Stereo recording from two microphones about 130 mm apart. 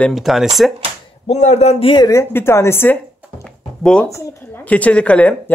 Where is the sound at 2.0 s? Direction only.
25° left (ahead or behind).